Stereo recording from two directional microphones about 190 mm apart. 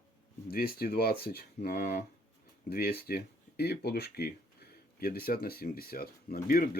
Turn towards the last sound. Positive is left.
turn(degrees=50)  # may be behind; listen again after turning